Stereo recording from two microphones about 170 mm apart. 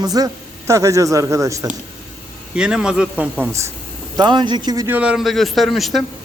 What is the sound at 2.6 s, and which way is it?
A man's voice, 5° right (ahead or behind).